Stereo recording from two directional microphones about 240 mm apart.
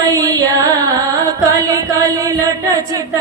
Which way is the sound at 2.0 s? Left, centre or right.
Centre.